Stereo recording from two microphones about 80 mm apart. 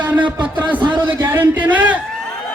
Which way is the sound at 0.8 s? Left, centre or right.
Right.